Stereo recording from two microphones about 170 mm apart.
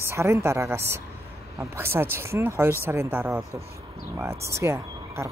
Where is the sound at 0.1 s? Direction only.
15° right (ahead or behind).